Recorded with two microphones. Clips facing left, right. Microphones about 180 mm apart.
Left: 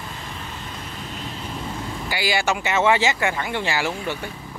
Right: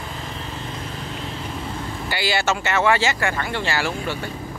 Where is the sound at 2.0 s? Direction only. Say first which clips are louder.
Even; 10° left (ahead or behind).